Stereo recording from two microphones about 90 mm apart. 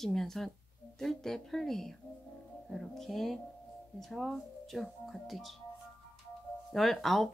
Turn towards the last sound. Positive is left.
turn(degrees=0)  # may be behind; listen again after turning